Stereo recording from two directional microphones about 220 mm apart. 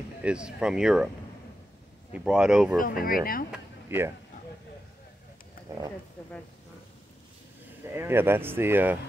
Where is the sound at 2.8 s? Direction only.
40° left (ahead or behind).